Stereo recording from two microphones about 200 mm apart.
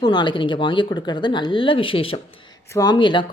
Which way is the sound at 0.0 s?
20° left (ahead or behind).